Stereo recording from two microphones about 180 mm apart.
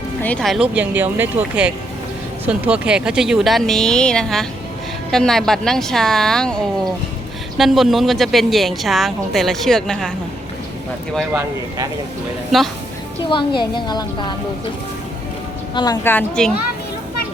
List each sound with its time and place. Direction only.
0.2 s speech: 5° left (ahead or behind)
12.5 s speech: centre (ahead or behind)
13.2 s a woman's voice: 25° left (ahead or behind)
15.7 s a woman's voice: 25° left (ahead or behind)
16.0 s speech: 5° left (ahead or behind)